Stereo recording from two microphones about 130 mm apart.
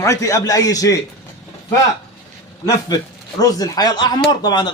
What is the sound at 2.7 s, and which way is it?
A man's voice, 30° left (ahead or behind).